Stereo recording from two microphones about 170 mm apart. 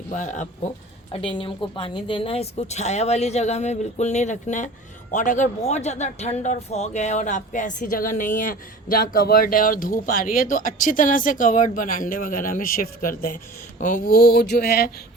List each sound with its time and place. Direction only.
0.1 s a man's voice: 45° left (ahead or behind)
1.1 s a woman's voice: 30° left (ahead or behind); by 14.8 s 70° left (ahead or behind)